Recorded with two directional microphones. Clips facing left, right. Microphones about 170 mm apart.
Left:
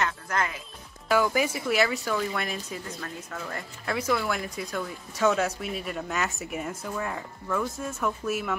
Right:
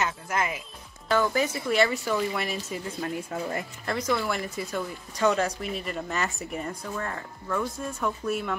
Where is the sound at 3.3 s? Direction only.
25° right (ahead or behind).